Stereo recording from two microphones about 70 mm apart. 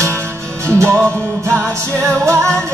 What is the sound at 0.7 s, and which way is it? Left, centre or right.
Music, right.